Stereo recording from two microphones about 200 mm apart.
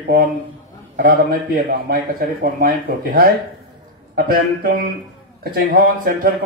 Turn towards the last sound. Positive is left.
turn(degrees=-50)  # may be behind; listen again after turning